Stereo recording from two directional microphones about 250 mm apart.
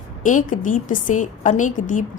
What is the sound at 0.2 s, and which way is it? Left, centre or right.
A woman's voice, left.